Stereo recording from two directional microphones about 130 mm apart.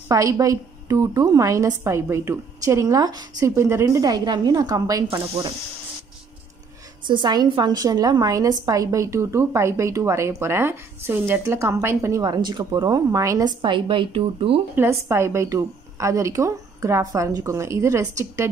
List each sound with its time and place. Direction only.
0.1 s a woman's voice: 25° right (ahead or behind)
7.1 s a woman's voice: 35° right (ahead or behind)
14.8 s a woman's voice: 20° right (ahead or behind)